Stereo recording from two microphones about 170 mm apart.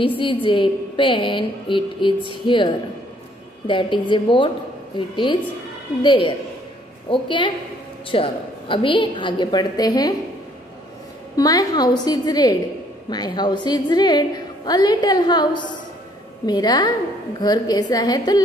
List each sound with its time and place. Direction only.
0.2 s a woman's voice: 30° left (ahead or behind)
11.3 s a woman's voice: 20° left (ahead or behind)